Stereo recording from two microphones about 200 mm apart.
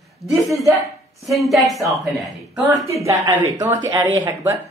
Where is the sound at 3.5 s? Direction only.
15° right (ahead or behind).